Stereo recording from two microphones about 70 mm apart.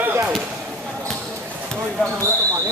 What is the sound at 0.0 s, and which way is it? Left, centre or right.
Chop, right.